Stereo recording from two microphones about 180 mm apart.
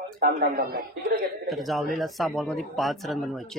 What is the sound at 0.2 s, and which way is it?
Speech, 60° right (ahead or behind).